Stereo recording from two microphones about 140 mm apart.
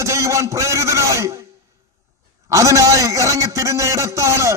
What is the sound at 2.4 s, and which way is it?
A man's voice, 25° right (ahead or behind).